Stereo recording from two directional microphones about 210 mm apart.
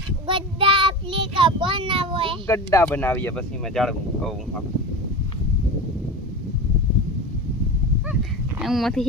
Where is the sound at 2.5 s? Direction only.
15° left (ahead or behind).